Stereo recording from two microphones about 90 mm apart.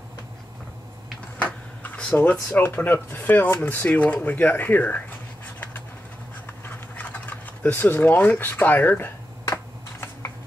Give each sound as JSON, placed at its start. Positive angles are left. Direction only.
{"t": 1.4, "sound": "a sound", "side_deg": 15}
{"t": 2.6, "sound": "speech", "side_deg": 20}
{"t": 6.4, "sound": "typing", "side_deg": 20}